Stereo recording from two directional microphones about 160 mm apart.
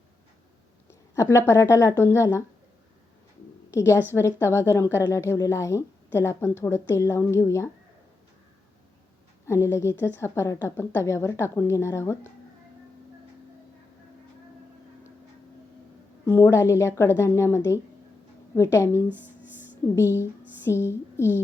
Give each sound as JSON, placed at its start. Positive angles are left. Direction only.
{"t": 0.9, "sound": "speech", "side_deg": 20}
{"t": 3.7, "sound": "a woman's voice", "side_deg": 15}
{"t": 9.5, "sound": "a woman's voice", "side_deg": 15}
{"t": 16.2, "sound": "a woman's voice", "side_deg": 15}
{"t": 19.0, "sound": "speech", "side_deg": -10}
{"t": 19.8, "sound": "a woman's voice", "side_deg": 15}